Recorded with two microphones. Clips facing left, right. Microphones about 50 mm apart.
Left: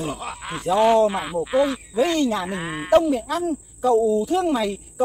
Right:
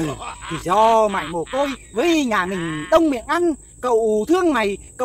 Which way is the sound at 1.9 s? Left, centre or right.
Right.